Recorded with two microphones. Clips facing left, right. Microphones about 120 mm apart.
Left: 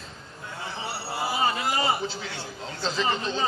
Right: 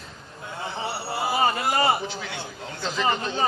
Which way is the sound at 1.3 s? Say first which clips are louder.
Right 3 dB; 50° right (ahead or behind).